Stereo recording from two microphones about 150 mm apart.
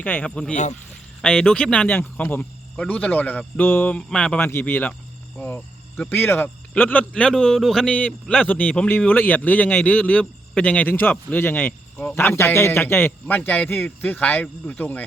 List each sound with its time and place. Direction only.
0.0 s speech: 10° left (ahead or behind)
0.5 s speech: 50° left (ahead or behind)
1.2 s speech: 5° left (ahead or behind)